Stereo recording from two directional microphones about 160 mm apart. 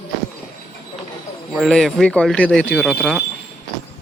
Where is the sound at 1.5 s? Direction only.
Centre (ahead or behind).